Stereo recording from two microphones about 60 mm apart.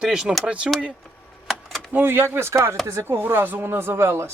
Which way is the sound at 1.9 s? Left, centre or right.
Right.